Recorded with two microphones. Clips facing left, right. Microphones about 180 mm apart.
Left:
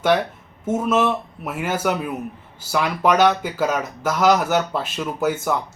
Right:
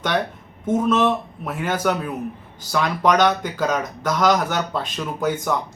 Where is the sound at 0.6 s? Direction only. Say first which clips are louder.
Right 1 dB; 5° left (ahead or behind).